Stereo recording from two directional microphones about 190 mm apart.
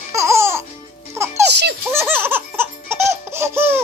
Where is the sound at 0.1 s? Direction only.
15° right (ahead or behind).